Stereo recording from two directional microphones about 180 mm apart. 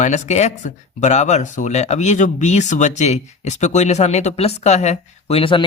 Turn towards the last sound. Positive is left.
turn(degrees=30)  # may be behind; listen again after turning